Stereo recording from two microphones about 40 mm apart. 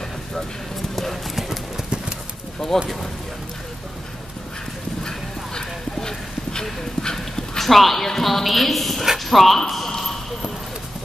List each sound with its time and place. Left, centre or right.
0.9 s clip-clop: centre
2.7 s speech: centre
5.0 s clip-clop: centre
7.6 s a woman's voice: centre
9.7 s a sound: centre